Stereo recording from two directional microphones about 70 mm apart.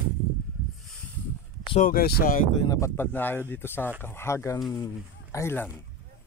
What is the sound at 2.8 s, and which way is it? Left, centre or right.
Speech, left.